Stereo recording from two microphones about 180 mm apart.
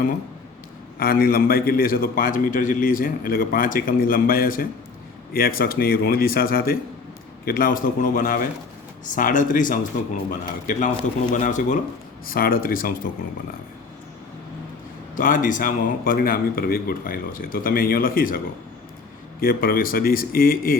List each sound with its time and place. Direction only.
0.9 s a man's voice: 60° left (ahead or behind); by 11.8 s 45° left (ahead or behind)
12.3 s speech: 55° left (ahead or behind)
15.1 s a man's voice: 50° left (ahead or behind)